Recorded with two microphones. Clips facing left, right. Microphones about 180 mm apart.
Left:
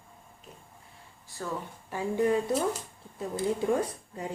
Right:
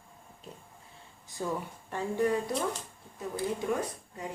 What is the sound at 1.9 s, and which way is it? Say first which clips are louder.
Speech: left 3 dB; 10° left (ahead or behind).